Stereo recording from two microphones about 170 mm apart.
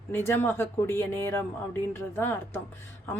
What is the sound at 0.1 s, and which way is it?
A woman's voice, 15° left (ahead or behind).